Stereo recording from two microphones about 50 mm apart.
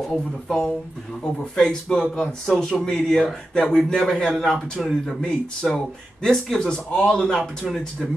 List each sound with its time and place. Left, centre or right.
0.1 s speech: centre